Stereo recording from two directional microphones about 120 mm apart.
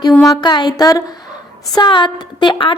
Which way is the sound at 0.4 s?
40° left (ahead or behind).